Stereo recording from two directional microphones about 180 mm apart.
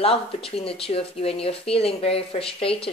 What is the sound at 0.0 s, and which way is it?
Speech, 30° left (ahead or behind).